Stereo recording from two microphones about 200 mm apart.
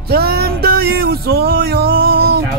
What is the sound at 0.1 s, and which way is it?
Music, 50° right (ahead or behind).